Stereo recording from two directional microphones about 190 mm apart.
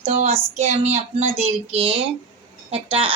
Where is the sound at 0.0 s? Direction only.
35° right (ahead or behind).